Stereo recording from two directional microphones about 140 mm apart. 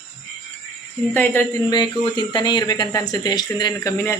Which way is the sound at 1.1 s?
15° left (ahead or behind).